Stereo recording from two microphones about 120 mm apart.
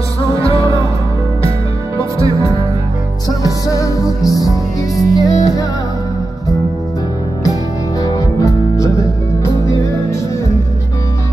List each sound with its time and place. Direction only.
0.3 s music: 30° right (ahead or behind)
2.0 s music: 25° right (ahead or behind)
3.3 s music: 30° left (ahead or behind)
8.0 s music: 30° left (ahead or behind)